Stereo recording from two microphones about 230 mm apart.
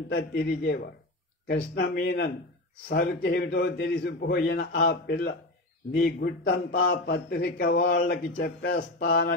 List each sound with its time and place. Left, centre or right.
0.1 s a man's voice: left